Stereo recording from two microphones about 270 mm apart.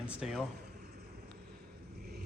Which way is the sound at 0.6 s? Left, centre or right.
Right.